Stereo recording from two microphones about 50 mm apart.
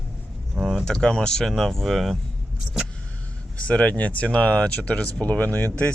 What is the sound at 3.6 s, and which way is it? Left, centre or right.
Speech, left.